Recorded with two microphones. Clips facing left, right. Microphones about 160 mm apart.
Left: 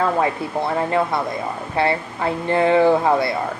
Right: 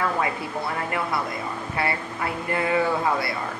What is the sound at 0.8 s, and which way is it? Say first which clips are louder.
A woman's voice: left 7 dB; 25° left (ahead or behind).